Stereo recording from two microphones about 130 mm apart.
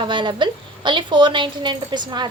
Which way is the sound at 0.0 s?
40° right (ahead or behind).